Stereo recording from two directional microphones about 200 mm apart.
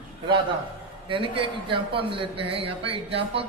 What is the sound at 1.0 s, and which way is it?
A man's voice, 25° right (ahead or behind).